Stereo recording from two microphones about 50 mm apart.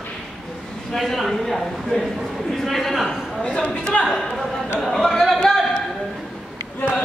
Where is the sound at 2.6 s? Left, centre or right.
Centre.